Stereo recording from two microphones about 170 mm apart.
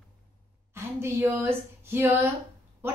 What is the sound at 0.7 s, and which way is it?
A woman's voice, 15° right (ahead or behind).